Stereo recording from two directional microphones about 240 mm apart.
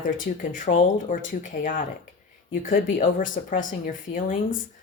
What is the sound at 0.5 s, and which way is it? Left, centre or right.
A woman's voice, left.